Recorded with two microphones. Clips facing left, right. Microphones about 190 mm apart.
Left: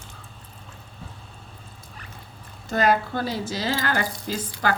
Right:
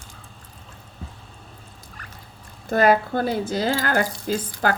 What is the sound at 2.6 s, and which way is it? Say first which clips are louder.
Speech: right 4 dB; 55° right (ahead or behind).